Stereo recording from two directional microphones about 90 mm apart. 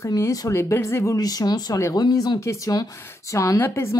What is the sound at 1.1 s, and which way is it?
Speech, 45° left (ahead or behind).